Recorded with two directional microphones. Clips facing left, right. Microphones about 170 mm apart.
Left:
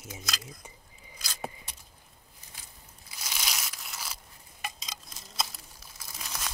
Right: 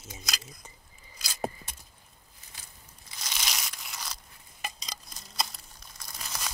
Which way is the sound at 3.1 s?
5° left (ahead or behind).